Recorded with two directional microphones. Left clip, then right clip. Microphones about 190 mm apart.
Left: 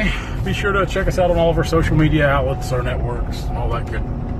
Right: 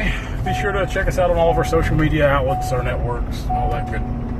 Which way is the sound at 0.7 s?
Centre (ahead or behind).